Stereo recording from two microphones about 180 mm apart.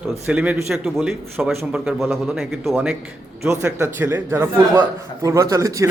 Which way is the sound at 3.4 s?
15° right (ahead or behind).